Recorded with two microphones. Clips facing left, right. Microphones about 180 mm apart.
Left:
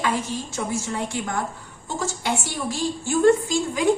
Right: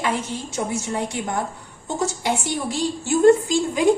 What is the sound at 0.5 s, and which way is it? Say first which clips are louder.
Speech: right 3 dB; 20° right (ahead or behind).